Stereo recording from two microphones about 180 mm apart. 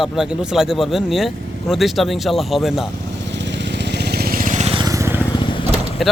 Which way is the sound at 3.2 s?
80° right.